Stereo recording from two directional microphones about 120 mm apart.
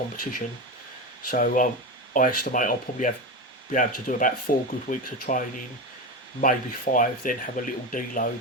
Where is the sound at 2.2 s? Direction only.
90° left.